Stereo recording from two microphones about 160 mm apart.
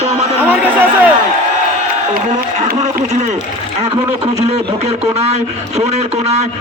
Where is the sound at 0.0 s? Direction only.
45° right (ahead or behind).